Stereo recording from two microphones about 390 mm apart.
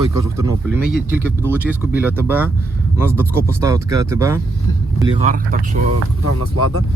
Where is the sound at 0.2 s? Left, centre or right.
Centre.